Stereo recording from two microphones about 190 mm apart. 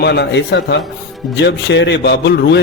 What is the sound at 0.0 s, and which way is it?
A man's voice, 60° left (ahead or behind).